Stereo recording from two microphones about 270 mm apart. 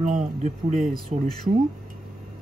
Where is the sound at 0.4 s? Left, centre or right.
Right.